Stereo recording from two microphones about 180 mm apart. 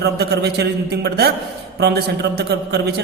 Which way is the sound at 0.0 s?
65° right (ahead or behind).